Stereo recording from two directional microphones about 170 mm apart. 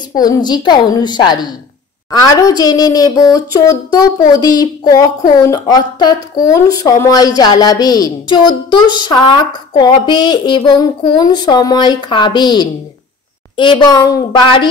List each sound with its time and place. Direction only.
0.1 s a woman's voice: 25° left (ahead or behind)